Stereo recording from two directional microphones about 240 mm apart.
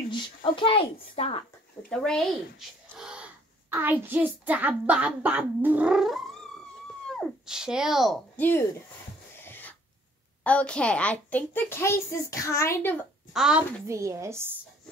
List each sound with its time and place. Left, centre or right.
0.1 s a woman's voice: centre
1.9 s a child's voice: centre
3.0 s gasp: centre
3.7 s a child's voice: centre
9.4 s sneeze: centre
10.4 s a child's voice: centre
13.3 s a child's voice: centre